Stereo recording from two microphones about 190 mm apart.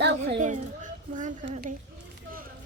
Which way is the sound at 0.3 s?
40° right (ahead or behind).